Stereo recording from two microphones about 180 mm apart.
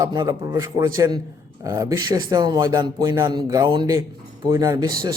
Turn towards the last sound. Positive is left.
turn(degrees=-20)  # may be behind; listen again after turning